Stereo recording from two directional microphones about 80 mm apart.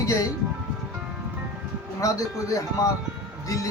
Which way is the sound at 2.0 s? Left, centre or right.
Left.